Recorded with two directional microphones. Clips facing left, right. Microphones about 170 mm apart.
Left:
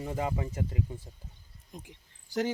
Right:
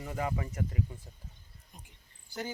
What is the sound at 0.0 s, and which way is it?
Speech, 25° left (ahead or behind).